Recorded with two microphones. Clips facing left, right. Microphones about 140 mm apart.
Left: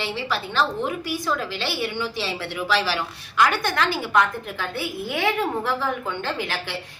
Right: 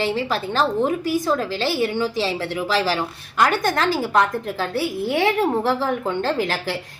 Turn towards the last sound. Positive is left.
turn(degrees=-35)  # may be behind; listen again after turning